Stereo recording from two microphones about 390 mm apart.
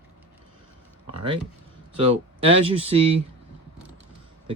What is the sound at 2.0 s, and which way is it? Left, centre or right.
Speech, centre.